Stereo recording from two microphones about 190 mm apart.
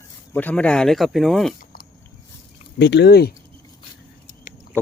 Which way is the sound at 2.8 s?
65° left (ahead or behind).